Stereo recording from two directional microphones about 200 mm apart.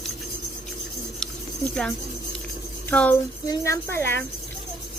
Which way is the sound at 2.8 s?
5° left (ahead or behind).